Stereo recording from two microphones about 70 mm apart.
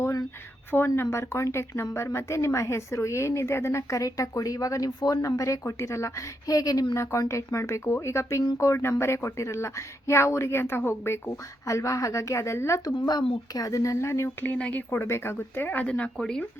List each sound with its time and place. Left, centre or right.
0.0 s a sound: left
0.7 s speech: centre
1.1 s speech: left
4.9 s speech: left
5.2 s speech: left
12.8 s speech: left
14.4 s speech: left